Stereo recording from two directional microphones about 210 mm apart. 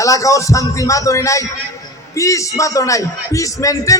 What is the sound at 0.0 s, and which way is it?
Speech, 15° left (ahead or behind).